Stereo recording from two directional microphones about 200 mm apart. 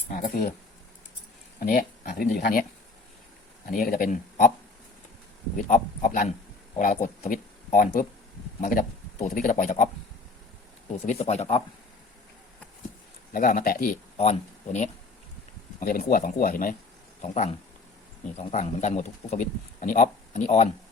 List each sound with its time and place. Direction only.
0.1 s speech: 45° left (ahead or behind)
1.5 s speech: 45° left (ahead or behind)
3.7 s speech: 45° left (ahead or behind)
5.5 s a man's voice: 40° left (ahead or behind)
11.0 s a man's voice: 35° left (ahead or behind)
13.3 s speech: 40° left (ahead or behind)
14.2 s speech: 35° left (ahead or behind)
15.8 s speech: 45° left (ahead or behind)
17.2 s a man's voice: 35° left (ahead or behind)